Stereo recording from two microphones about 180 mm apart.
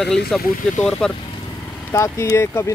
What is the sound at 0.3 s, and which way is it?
Speech, 5° left (ahead or behind).